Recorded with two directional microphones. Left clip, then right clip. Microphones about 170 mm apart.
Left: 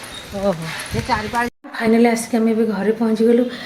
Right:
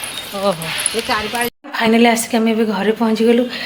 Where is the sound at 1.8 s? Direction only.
5° left (ahead or behind).